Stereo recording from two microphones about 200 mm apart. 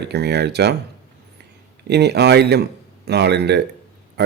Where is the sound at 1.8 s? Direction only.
55° right (ahead or behind).